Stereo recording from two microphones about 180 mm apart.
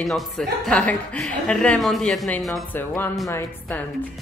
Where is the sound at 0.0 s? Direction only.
Centre (ahead or behind).